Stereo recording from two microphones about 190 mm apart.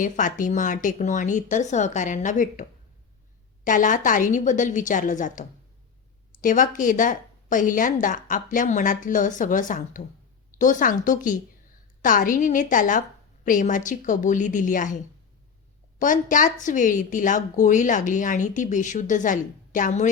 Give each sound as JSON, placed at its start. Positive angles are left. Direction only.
{"t": 0.0, "sound": "a woman's voice", "side_deg": 45}